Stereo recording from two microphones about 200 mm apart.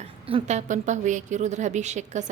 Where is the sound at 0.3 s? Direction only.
30° right (ahead or behind).